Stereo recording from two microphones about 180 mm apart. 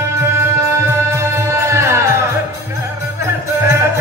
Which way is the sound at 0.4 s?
15° right (ahead or behind).